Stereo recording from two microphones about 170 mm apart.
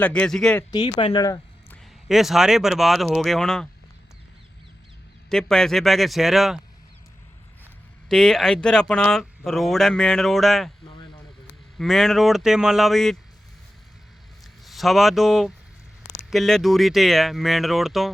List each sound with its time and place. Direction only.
0.0 s speech: 5° left (ahead or behind)
0.7 s speech: 25° left (ahead or behind)
2.0 s speech: centre (ahead or behind)
5.3 s speech: 5° left (ahead or behind)
8.1 s speech: centre (ahead or behind)
11.8 s speech: centre (ahead or behind)
14.6 s speech: centre (ahead or behind)